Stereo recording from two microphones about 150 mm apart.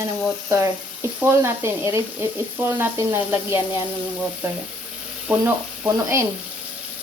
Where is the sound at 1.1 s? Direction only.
15° right (ahead or behind).